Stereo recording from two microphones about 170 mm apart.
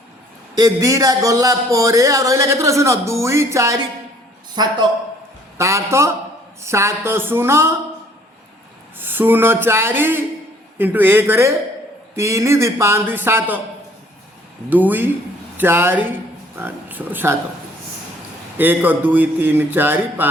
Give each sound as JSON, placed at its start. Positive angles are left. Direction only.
{"t": 0.6, "sound": "a man's voice", "side_deg": -20}
{"t": 9.0, "sound": "a man's voice", "side_deg": -10}
{"t": 14.7, "sound": "a man's voice", "side_deg": -10}
{"t": 18.5, "sound": "a man's voice", "side_deg": -10}